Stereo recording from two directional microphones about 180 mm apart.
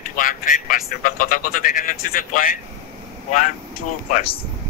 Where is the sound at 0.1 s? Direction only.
50° left (ahead or behind).